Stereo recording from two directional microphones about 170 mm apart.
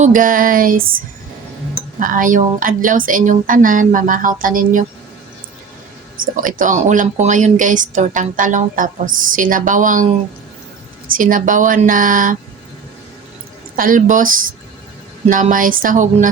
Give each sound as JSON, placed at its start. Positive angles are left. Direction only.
{"t": 0.0, "sound": "a sound", "side_deg": -50}
{"t": 2.0, "sound": "speech", "side_deg": -55}
{"t": 6.3, "sound": "speech", "side_deg": -50}
{"t": 11.1, "sound": "speech", "side_deg": -55}
{"t": 13.7, "sound": "speech", "side_deg": -55}